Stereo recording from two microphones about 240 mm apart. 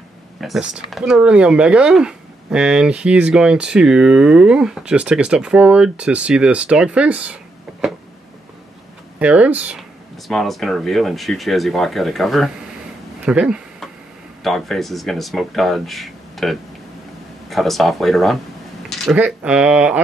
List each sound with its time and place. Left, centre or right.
0.4 s speech: centre
9.2 s speech: centre
13.2 s a sound: centre
14.4 s speech: centre